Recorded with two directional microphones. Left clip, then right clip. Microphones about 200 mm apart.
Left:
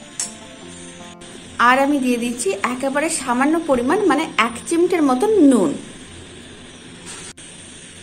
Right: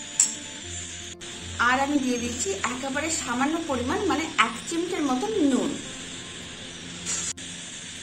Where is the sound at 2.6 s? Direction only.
50° left (ahead or behind).